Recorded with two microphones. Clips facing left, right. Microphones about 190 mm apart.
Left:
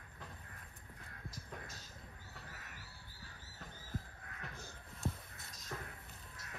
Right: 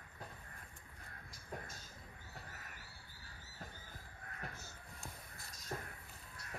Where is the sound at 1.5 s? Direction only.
50° right (ahead or behind).